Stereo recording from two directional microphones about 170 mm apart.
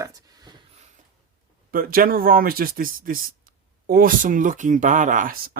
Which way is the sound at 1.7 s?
60° right (ahead or behind).